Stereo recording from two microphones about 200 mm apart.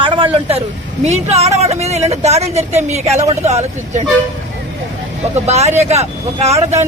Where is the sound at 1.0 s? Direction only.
30° right (ahead or behind).